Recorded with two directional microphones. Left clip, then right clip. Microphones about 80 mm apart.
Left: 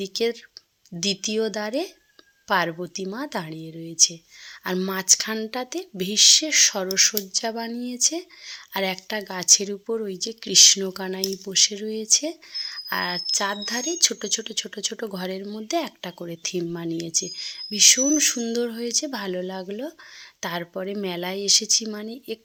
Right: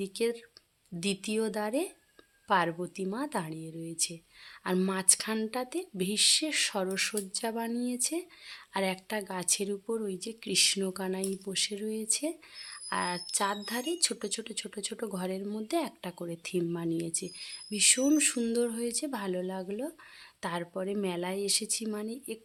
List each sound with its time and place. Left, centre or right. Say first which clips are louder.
0.0 s speech: left 7 dB; left